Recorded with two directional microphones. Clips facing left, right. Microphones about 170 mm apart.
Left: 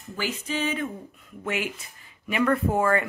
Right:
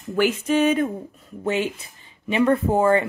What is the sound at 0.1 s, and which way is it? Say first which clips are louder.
Speech: right 10 dB; 60° right (ahead or behind).